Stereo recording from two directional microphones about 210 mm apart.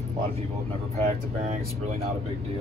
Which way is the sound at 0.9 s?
30° right (ahead or behind).